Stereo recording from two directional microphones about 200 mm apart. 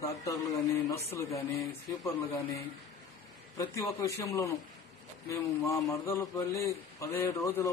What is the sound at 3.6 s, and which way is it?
A man's voice, 15° left (ahead or behind).